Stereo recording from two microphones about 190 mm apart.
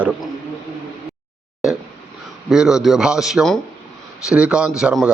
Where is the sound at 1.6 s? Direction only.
Centre (ahead or behind).